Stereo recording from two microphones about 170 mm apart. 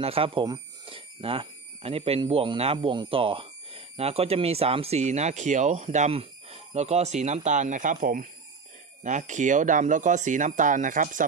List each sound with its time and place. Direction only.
0.0 s speech: 35° right (ahead or behind); by 11.2 s 50° right (ahead or behind)